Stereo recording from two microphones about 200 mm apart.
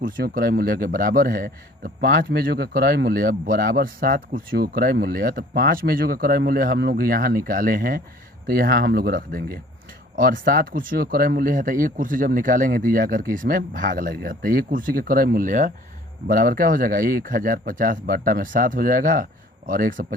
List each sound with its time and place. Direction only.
0.0 s a man's voice: 45° right (ahead or behind)